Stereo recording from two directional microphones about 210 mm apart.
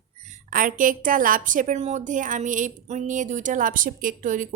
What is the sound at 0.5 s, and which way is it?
A woman's voice, 40° right (ahead or behind).